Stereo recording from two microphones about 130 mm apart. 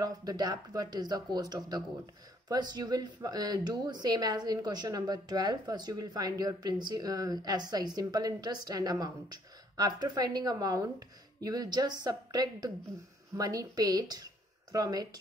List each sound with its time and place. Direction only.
0.0 s speech: 30° right (ahead or behind)